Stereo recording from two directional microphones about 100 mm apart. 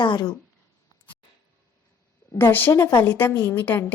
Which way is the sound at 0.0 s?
50° left (ahead or behind).